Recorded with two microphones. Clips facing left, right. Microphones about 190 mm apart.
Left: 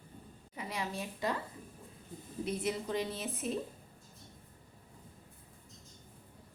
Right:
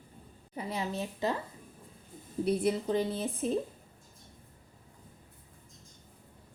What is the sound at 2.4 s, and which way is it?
A woman's voice, 35° right (ahead or behind).